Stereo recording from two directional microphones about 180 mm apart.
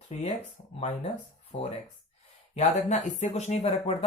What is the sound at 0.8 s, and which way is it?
Speech, 35° left (ahead or behind).